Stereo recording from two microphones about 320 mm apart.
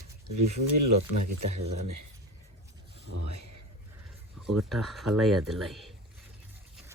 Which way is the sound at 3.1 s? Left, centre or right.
Right.